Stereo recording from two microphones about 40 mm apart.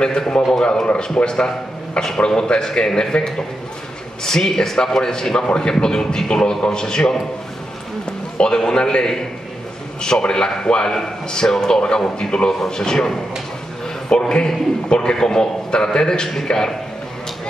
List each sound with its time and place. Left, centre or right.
0.0 s a man's voice: centre
8.5 s a man's voice: centre
11.0 s a man's voice: centre